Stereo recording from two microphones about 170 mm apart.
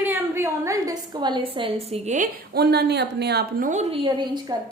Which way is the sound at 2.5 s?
70° right (ahead or behind).